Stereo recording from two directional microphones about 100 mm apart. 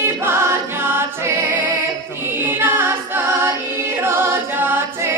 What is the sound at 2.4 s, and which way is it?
Music, 20° right (ahead or behind).